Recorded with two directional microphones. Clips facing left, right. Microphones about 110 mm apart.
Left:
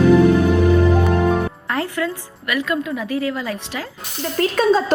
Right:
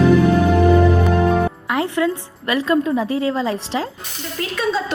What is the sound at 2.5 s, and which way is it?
A woman's voice, 30° right (ahead or behind).